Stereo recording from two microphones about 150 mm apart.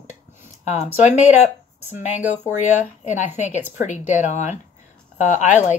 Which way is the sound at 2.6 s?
50° left (ahead or behind).